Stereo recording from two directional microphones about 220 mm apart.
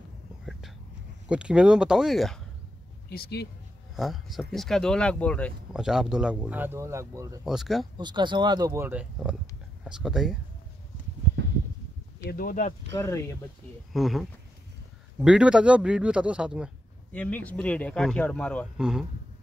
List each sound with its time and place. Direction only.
0.5 s whispering: centre (ahead or behind)
1.3 s speech: 5° right (ahead or behind)
3.1 s a man's voice: 45° left (ahead or behind)
3.9 s speech: centre (ahead or behind)
7.4 s speech: centre (ahead or behind)
8.0 s speech: 20° right (ahead or behind); by 10.3 s centre (ahead or behind)
12.3 s speech: 40° left (ahead or behind)
12.9 s speech: 10° left (ahead or behind)
13.9 s speech: centre (ahead or behind)
17.1 s speech: 5° left (ahead or behind)